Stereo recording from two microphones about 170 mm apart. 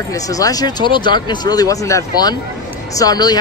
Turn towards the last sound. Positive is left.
turn(degrees=20)  # may be behind; listen again after turning